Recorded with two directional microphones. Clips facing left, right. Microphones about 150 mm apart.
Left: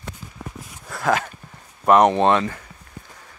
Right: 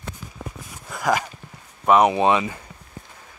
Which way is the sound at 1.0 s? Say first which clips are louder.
Left 1 dB; 10° right (ahead or behind).